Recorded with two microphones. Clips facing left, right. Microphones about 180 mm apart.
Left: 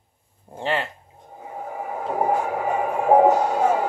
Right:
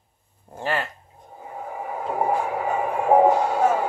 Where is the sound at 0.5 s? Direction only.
20° left (ahead or behind).